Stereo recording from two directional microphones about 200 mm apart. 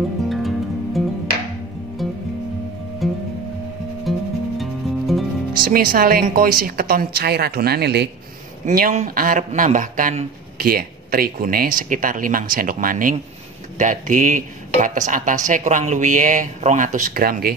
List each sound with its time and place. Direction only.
0.3 s music: centre (ahead or behind)
5.7 s speech: 45° right (ahead or behind)
8.6 s speech: 40° right (ahead or behind)